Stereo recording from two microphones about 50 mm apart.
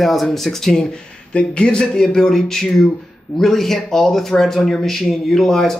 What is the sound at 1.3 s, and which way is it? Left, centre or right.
Speech, left.